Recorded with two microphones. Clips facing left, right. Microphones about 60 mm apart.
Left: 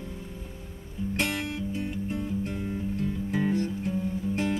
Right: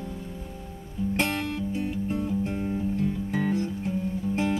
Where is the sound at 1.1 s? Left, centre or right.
Right.